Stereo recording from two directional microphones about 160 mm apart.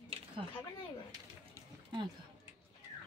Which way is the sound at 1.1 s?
25° right (ahead or behind).